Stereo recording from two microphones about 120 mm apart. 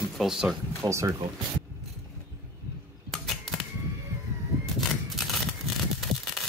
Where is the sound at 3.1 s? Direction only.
Centre (ahead or behind).